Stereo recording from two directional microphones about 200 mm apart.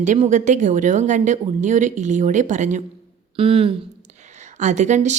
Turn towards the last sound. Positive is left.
turn(degrees=-35)  # may be behind; listen again after turning